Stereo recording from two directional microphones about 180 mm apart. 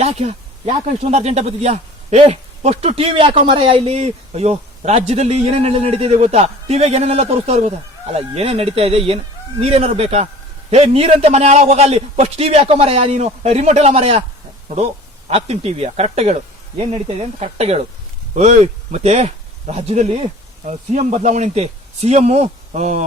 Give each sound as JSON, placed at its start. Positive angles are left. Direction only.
{"t": 0.0, "sound": "speech", "side_deg": -35}
{"t": 15.3, "sound": "speech", "side_deg": -35}